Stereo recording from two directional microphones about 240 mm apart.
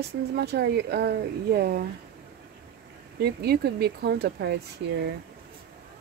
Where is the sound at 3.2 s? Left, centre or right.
Right.